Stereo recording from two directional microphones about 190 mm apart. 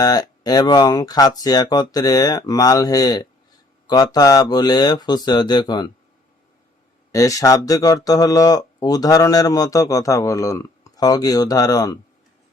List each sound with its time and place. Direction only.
0.0 s speech: 20° left (ahead or behind)
7.1 s speech: 15° left (ahead or behind)